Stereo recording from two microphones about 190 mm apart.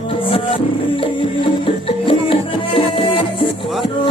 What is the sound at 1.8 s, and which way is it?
Music, 30° left (ahead or behind).